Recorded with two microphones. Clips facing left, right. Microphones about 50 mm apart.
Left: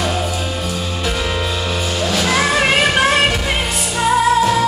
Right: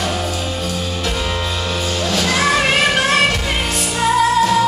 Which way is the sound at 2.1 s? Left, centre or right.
Centre.